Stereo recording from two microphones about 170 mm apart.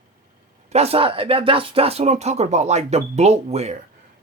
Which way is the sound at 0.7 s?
35° right (ahead or behind).